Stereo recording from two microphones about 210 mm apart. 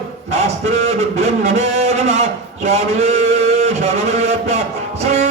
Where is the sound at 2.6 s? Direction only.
30° right (ahead or behind).